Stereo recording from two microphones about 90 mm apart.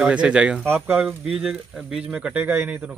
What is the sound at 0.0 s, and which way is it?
Speech, 10° right (ahead or behind).